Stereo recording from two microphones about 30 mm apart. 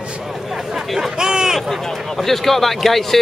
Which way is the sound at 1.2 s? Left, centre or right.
Right.